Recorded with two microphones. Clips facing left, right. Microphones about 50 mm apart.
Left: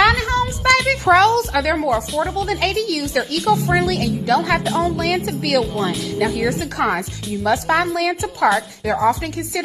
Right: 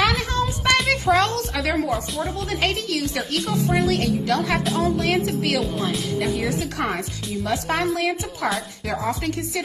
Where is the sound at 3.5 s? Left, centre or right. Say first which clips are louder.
Left 4 dB; left.